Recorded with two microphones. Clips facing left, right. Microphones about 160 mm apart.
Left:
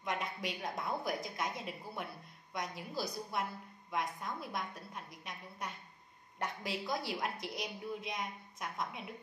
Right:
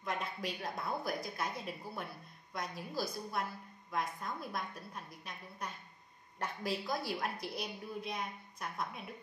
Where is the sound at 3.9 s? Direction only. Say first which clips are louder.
Even; 15° left (ahead or behind).